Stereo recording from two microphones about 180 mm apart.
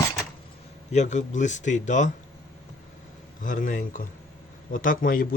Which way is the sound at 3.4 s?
45° left (ahead or behind).